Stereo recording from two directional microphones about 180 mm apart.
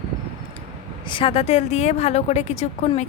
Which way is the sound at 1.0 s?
30° left (ahead or behind).